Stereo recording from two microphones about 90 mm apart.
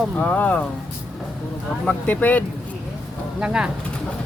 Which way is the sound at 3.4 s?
10° right (ahead or behind).